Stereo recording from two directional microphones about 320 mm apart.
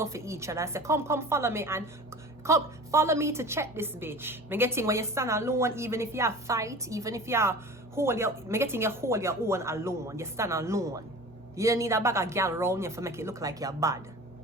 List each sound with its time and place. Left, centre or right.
0.0 s a woman's voice: centre